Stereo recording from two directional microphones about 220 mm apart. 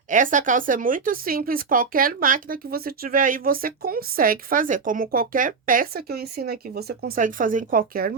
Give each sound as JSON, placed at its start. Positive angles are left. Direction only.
{"t": 0.1, "sound": "speech", "side_deg": -35}